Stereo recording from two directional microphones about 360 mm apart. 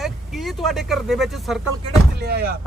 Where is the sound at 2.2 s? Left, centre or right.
Right.